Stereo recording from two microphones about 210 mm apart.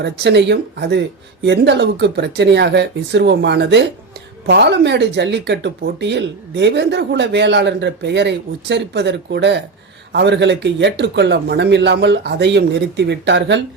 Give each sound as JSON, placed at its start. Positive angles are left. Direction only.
{"t": 0.0, "sound": "speech", "side_deg": -55}